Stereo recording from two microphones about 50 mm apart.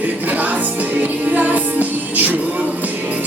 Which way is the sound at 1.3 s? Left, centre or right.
Right.